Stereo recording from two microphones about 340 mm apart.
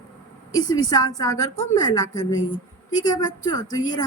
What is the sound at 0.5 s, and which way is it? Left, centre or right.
Speech, centre.